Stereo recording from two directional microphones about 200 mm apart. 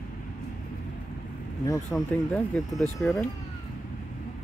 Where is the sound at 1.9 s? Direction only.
5° left (ahead or behind).